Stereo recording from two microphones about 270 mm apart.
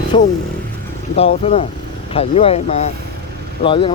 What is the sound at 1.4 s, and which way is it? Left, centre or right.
Speech, left.